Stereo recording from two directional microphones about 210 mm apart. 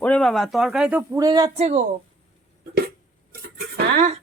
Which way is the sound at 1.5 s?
30° right (ahead or behind).